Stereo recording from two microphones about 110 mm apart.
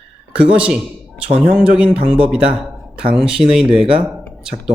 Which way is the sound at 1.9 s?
60° right (ahead or behind).